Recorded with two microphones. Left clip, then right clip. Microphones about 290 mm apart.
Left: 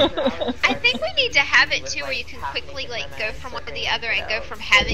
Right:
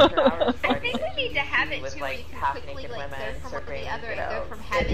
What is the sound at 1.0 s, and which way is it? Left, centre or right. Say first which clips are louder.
A woman's voice: left 8 dB; left.